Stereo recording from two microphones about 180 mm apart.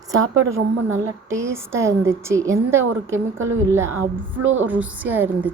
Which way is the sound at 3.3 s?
90° right.